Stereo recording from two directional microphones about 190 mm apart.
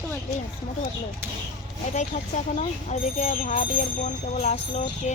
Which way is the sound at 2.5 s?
40° left (ahead or behind).